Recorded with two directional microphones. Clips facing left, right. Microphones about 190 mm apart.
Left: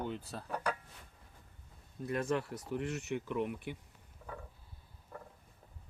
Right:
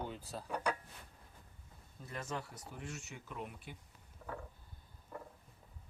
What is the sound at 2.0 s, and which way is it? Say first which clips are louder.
Speech: left 9 dB; 65° left (ahead or behind).